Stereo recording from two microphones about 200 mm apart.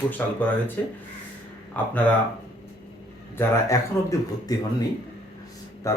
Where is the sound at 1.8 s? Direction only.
5° left (ahead or behind).